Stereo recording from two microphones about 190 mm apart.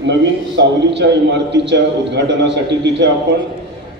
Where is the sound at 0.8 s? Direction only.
65° right (ahead or behind).